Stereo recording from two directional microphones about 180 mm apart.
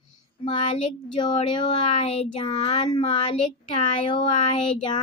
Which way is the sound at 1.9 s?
35° left (ahead or behind).